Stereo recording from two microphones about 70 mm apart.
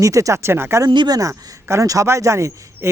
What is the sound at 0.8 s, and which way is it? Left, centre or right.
Speech, right.